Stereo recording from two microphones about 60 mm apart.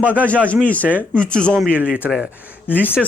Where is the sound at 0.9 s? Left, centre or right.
Right.